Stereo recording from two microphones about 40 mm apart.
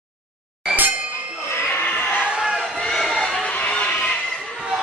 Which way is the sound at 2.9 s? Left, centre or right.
Centre.